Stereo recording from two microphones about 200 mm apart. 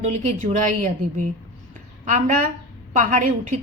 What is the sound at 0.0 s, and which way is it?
Speech, 35° right (ahead or behind).